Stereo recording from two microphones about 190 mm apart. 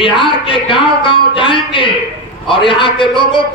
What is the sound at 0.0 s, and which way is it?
Music, 25° left (ahead or behind).